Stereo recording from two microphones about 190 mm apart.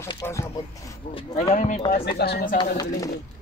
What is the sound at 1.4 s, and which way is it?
Speech, 40° left (ahead or behind).